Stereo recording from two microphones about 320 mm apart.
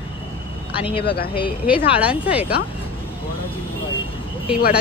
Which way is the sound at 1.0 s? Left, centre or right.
Left.